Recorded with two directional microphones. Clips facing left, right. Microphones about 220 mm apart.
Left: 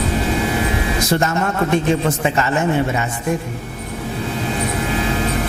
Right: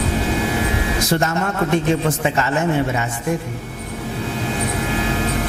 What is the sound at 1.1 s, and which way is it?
A man's voice, 20° left (ahead or behind).